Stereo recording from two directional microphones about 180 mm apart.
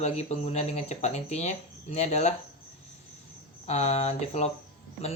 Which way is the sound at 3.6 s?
35° left (ahead or behind).